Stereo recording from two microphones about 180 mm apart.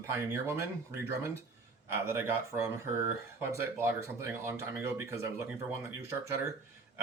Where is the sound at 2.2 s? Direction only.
15° right (ahead or behind).